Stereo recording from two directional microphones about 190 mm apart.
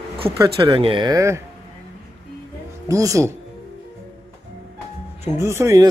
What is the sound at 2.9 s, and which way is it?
Speech, 15° right (ahead or behind).